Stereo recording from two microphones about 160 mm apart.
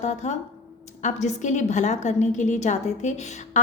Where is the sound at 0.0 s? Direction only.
45° left (ahead or behind).